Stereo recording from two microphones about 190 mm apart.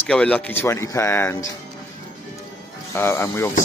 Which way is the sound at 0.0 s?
5° left (ahead or behind).